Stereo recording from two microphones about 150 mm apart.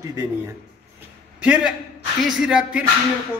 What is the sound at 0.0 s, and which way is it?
Speech, 20° right (ahead or behind).